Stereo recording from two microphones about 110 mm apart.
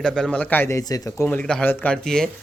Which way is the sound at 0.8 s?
30° left (ahead or behind).